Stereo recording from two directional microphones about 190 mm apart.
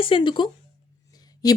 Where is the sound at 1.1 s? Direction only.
20° left (ahead or behind).